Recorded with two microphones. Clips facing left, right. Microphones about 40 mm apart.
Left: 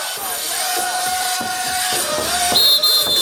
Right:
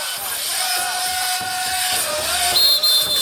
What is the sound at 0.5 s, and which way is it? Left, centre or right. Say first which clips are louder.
Music: left 2 dB; left.